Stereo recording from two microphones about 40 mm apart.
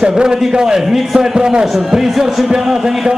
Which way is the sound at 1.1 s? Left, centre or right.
Centre.